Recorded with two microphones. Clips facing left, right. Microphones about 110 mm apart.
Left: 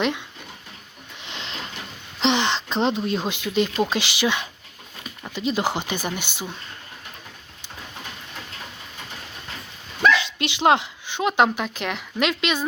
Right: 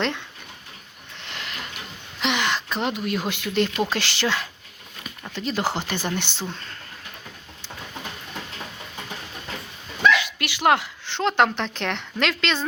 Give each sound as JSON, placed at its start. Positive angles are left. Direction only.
{"t": 1.2, "sound": "a sound", "side_deg": 20}
{"t": 2.2, "sound": "speech", "side_deg": 30}
{"t": 10.1, "sound": "speech", "side_deg": 25}
{"t": 12.2, "sound": "speech", "side_deg": 15}